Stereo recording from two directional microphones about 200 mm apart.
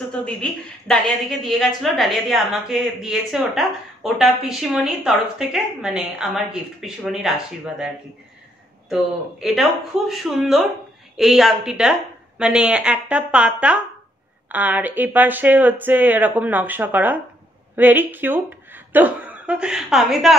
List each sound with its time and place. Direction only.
0.1 s a woman's voice: 5° left (ahead or behind)